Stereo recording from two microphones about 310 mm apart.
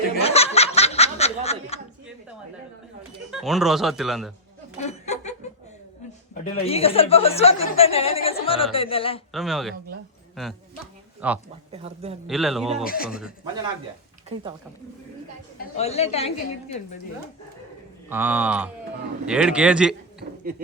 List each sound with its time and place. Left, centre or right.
0.2 s snicker: centre
1.7 s a sound: centre
3.3 s speech: centre
4.8 s snicker: left
6.3 s speech: centre
9.3 s speech: centre
11.2 s speech: centre
11.7 s speech: centre
12.3 s speech: centre
12.8 s speech: left
13.1 s speech: centre
15.5 s speech: left
18.1 s speech: centre